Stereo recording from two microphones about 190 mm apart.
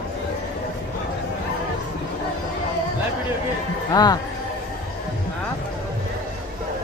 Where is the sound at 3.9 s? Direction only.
20° left (ahead or behind).